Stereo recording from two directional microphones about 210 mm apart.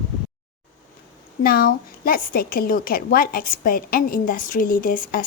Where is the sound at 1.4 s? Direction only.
45° left (ahead or behind).